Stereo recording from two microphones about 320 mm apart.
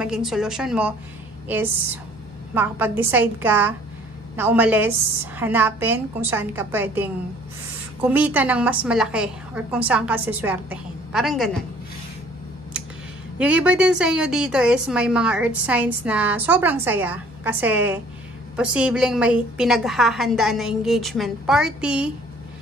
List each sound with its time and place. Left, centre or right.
0.0 s a woman's voice: centre
13.4 s a woman's voice: centre